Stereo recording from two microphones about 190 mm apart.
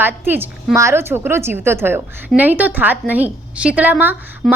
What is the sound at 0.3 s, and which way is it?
A woman's voice, 10° right (ahead or behind).